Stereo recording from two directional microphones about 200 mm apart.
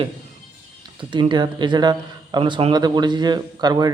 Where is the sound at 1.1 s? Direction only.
25° right (ahead or behind).